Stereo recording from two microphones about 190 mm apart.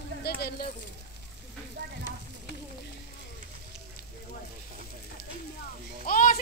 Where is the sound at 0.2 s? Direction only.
55° left (ahead or behind).